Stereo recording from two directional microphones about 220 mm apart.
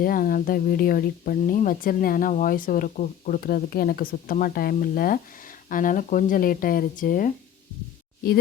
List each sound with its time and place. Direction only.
0.0 s speech: 40° left (ahead or behind)